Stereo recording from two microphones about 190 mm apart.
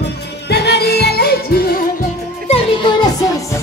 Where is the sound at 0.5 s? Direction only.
60° left (ahead or behind).